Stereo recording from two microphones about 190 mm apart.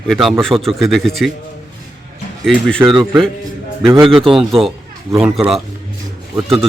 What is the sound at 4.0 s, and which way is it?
Speech, 30° right (ahead or behind).